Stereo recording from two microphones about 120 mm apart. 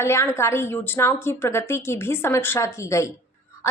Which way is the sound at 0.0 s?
20° left (ahead or behind).